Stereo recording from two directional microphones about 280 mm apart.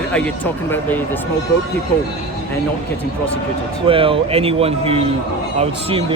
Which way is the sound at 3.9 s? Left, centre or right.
Centre.